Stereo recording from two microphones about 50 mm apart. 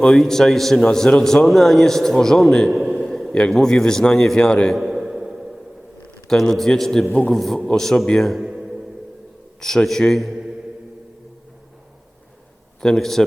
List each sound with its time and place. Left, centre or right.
0.2 s a man's voice: centre
2.6 s a man's voice: centre
3.0 s a sound: centre
3.5 s a man's voice: centre
4.4 s a man's voice: centre
4.7 s a sound: centre
6.2 s a man's voice: centre
8.4 s music: centre
9.6 s a man's voice: centre
12.8 s a man's voice: centre